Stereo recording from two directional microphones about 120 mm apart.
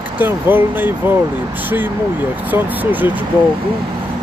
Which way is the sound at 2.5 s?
15° right (ahead or behind).